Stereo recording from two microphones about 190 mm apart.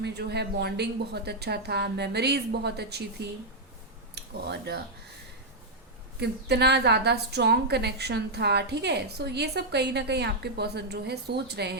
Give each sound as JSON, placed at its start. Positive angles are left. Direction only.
{"t": 0.0, "sound": "a woman's voice", "side_deg": -60}
{"t": 6.1, "sound": "a woman's voice", "side_deg": -60}